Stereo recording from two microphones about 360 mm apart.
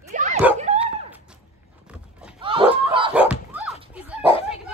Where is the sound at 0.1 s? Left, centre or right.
Centre.